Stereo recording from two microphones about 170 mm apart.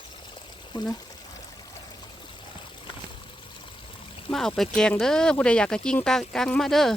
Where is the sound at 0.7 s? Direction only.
25° left (ahead or behind).